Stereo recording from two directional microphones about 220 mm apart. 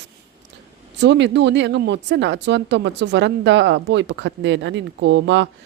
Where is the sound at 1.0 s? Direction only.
55° right (ahead or behind).